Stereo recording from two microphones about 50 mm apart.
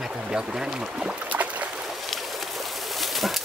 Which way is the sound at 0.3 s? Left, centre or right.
Centre.